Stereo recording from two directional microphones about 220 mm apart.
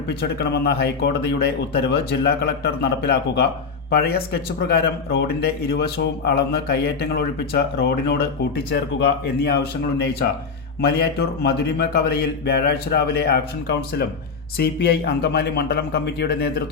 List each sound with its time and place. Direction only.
0.1 s speech: 45° left (ahead or behind)
10.8 s speech: 45° left (ahead or behind)